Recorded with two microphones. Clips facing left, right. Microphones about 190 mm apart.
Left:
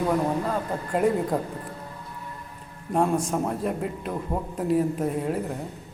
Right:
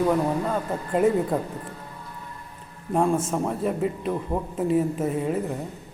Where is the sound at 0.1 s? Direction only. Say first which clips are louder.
Right 1 dB; centre (ahead or behind).